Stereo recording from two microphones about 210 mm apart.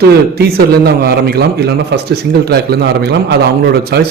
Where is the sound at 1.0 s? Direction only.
50° right (ahead or behind).